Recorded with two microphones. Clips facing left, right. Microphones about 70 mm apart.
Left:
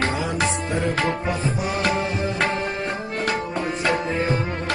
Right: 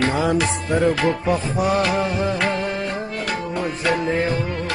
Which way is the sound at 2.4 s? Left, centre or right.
Left.